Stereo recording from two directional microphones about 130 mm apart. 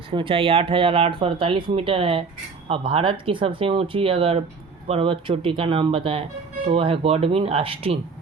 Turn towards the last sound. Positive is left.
turn(degrees=-45)  # may be behind; listen again after turning